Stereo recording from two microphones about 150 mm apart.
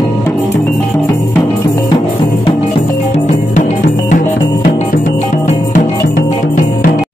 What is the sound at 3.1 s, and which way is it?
Music, 50° left (ahead or behind).